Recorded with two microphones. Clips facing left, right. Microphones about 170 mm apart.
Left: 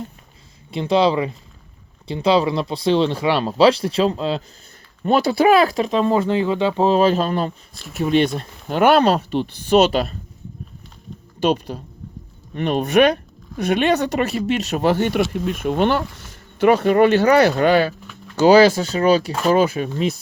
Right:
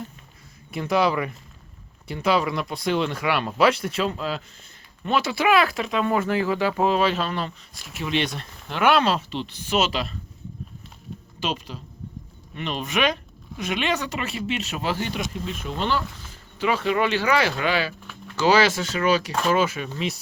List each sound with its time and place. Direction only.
0.7 s speech: 25° left (ahead or behind)
5.9 s speech: 30° left (ahead or behind); by 9.5 s 50° left (ahead or behind)
9.6 s speech: 40° left (ahead or behind)
12.5 s speech: 50° left (ahead or behind)
14.3 s speech: 40° left (ahead or behind)
14.8 s speech: 60° left (ahead or behind)
18.3 s speech: 35° left (ahead or behind)